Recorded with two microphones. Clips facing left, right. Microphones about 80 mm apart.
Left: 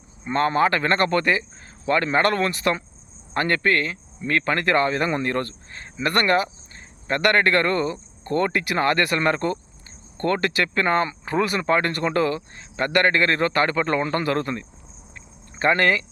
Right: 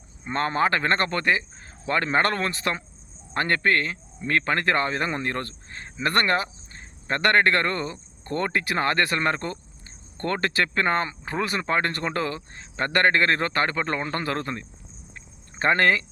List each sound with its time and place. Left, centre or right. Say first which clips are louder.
0.3 s speech: left 3 dB; right